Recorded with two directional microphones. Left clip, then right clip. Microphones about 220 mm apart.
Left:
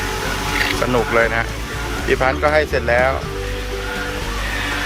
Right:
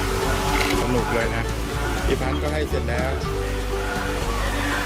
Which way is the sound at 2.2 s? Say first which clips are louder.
Left 10 dB; centre (ahead or behind).